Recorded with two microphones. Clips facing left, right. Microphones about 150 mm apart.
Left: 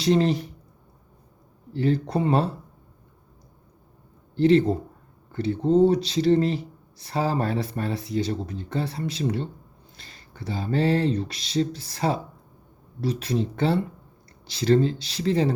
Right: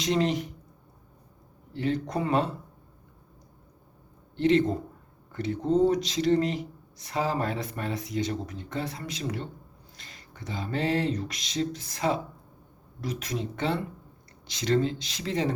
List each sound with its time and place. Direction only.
0.0 s speech: 35° left (ahead or behind)
1.7 s speech: 35° left (ahead or behind)
4.4 s a man's voice: 35° left (ahead or behind)